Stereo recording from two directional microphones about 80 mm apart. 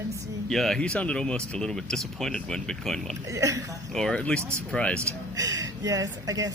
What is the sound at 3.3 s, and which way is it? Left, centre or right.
Speech, right.